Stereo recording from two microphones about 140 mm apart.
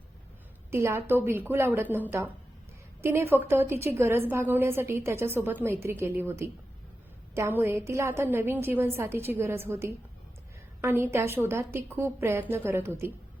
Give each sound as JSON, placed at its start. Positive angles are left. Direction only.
{"t": 0.7, "sound": "a woman's voice", "side_deg": -20}